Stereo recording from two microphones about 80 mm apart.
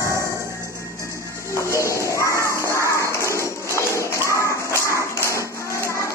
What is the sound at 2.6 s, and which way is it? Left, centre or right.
Music, left.